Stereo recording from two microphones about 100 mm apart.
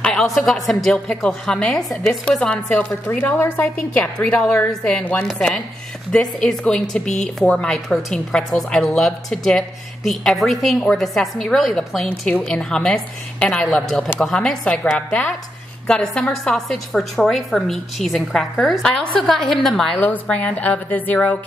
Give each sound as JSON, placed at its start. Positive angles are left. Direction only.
{"t": 0.0, "sound": "a woman's voice", "side_deg": 5}
{"t": 4.0, "sound": "a woman's voice", "side_deg": 10}
{"t": 12.1, "sound": "a woman's voice", "side_deg": 15}
{"t": 20.0, "sound": "a woman's voice", "side_deg": 15}